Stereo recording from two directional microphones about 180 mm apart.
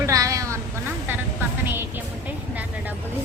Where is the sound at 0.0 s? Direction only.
20° right (ahead or behind).